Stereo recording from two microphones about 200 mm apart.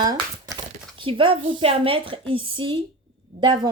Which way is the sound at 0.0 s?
20° right (ahead or behind).